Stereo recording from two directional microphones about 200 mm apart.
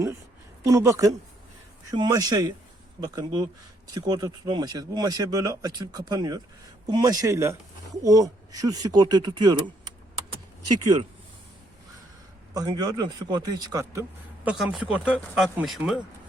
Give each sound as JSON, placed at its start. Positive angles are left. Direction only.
{"t": 0.6, "sound": "a woman's voice", "side_deg": -15}
{"t": 12.5, "sound": "speech", "side_deg": -20}
{"t": 14.4, "sound": "speech", "side_deg": 0}